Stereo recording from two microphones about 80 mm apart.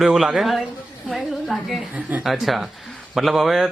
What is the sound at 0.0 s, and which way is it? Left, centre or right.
Speech, centre.